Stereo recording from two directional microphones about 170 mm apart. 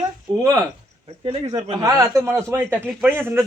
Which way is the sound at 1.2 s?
35° right (ahead or behind).